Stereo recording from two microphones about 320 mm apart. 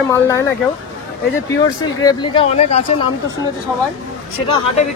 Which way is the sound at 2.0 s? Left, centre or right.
Centre.